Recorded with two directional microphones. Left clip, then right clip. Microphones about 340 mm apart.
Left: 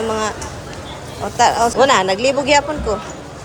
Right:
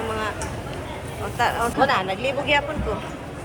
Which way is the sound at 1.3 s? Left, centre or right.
Centre.